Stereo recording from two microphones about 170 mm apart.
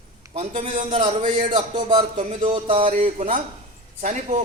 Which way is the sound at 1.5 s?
30° right (ahead or behind).